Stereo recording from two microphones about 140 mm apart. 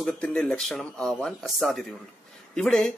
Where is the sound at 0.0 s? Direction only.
5° left (ahead or behind).